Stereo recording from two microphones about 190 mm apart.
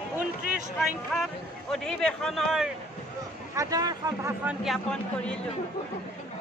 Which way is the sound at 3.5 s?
20° right (ahead or behind).